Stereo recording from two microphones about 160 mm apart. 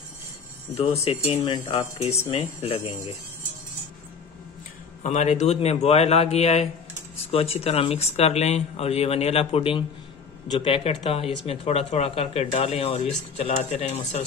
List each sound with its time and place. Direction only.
1.0 s speech: 40° left (ahead or behind)
5.0 s speech: 45° left (ahead or behind)